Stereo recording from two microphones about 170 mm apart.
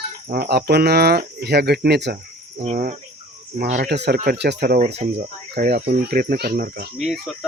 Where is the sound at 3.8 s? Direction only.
80° right; by 6.9 s 65° right (ahead or behind).